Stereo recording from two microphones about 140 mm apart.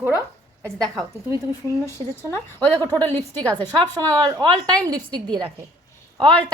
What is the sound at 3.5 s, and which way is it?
A woman's voice, 30° right (ahead or behind).